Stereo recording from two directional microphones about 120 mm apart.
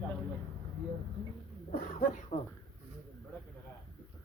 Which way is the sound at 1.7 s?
90° left.